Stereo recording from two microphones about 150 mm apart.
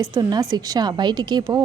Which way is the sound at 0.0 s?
25° right (ahead or behind).